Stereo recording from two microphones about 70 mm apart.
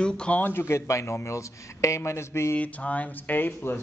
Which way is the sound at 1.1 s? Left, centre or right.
Left.